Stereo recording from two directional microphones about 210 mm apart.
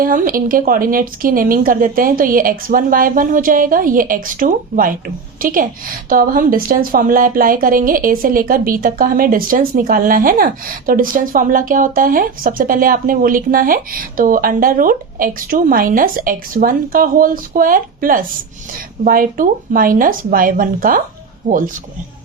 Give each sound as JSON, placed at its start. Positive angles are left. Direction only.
{"t": 0.0, "sound": "a woman's voice", "side_deg": -40}